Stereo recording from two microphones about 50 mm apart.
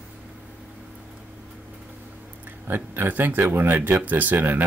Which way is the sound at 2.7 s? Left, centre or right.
Right.